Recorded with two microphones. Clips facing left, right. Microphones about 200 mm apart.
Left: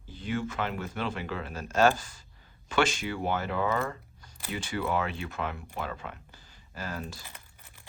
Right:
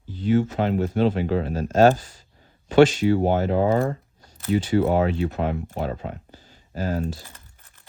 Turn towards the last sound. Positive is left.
turn(degrees=15)  # may be behind; listen again after turning